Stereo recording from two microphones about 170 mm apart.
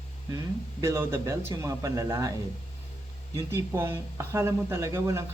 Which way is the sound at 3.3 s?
15° right (ahead or behind).